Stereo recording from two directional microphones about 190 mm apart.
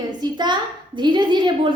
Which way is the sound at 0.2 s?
25° right (ahead or behind).